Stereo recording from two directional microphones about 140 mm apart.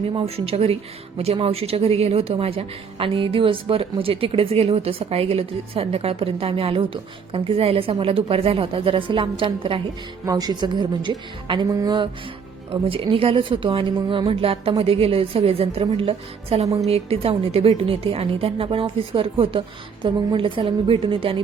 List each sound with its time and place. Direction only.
0.1 s a woman's voice: 45° right (ahead or behind)
10.2 s a woman's voice: 30° right (ahead or behind)
12.7 s a woman's voice: 40° right (ahead or behind)